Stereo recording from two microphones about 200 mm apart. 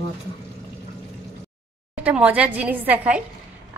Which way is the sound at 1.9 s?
5° right (ahead or behind).